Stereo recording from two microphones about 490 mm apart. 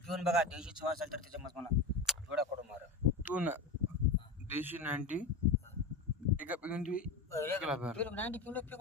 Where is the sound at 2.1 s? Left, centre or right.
Centre.